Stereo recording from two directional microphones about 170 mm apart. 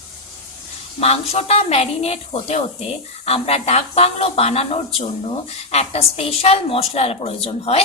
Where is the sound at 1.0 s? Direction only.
35° left (ahead or behind).